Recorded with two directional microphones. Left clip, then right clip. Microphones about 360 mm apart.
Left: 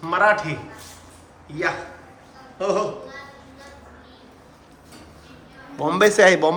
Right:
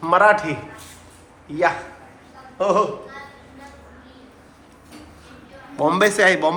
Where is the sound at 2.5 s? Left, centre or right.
Centre.